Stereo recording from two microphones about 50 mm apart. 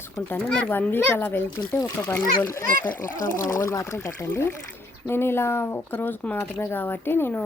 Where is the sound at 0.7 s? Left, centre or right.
Left.